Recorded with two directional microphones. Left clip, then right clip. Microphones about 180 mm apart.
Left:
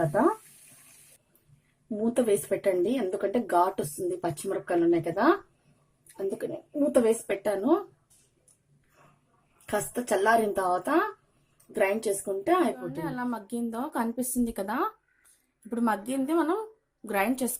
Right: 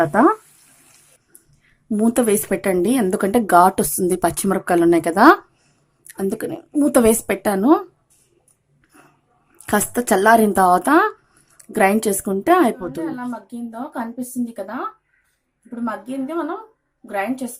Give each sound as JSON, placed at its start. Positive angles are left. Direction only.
{"t": 0.0, "sound": "a woman's voice", "side_deg": -40}
{"t": 2.0, "sound": "speech", "side_deg": -40}
{"t": 6.3, "sound": "speech", "side_deg": -45}
{"t": 9.6, "sound": "a woman's voice", "side_deg": -40}
{"t": 13.1, "sound": "a woman's voice", "side_deg": 40}